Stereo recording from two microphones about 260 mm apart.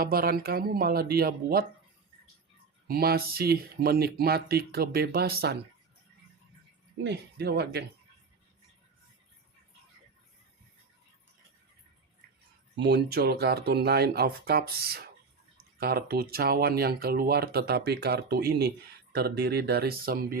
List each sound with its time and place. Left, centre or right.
0.0 s speech: right
2.8 s speech: right
7.0 s speech: right
12.7 s speech: right